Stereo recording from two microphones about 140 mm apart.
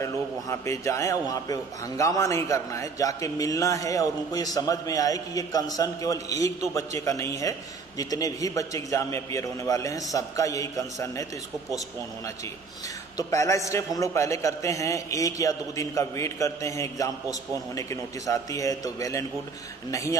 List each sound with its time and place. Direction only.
0.0 s a man's voice: 20° left (ahead or behind)
13.3 s a man's voice: 20° left (ahead or behind)